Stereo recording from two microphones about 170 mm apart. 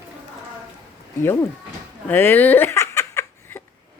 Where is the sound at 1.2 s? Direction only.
15° left (ahead or behind).